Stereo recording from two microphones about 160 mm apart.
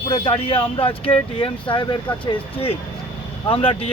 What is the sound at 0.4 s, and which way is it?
Speech, 35° left (ahead or behind).